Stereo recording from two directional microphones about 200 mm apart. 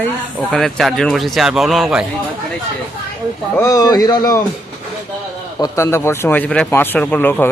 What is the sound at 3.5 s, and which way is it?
Speech, 15° left (ahead or behind).